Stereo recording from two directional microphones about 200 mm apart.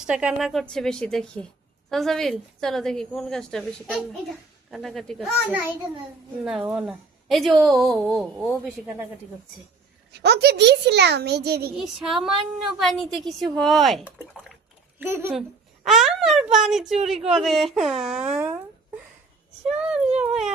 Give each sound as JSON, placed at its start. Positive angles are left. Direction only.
{"t": 0.0, "sound": "speech", "side_deg": -5}
{"t": 10.1, "sound": "a child's voice", "side_deg": -55}
{"t": 11.8, "sound": "speech", "side_deg": 0}
{"t": 19.7, "sound": "speech", "side_deg": -5}